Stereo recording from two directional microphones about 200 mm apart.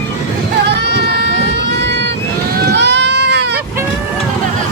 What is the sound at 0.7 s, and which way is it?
Music, 55° right (ahead or behind).